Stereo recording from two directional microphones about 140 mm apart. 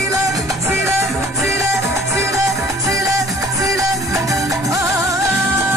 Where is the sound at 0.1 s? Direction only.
20° right (ahead or behind).